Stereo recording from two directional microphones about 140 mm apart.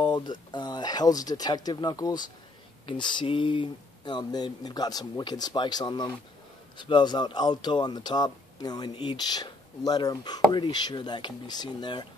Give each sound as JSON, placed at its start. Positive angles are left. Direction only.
{"t": 0.0, "sound": "speech", "side_deg": 30}